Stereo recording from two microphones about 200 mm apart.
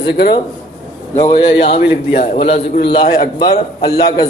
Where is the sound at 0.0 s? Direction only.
55° left (ahead or behind).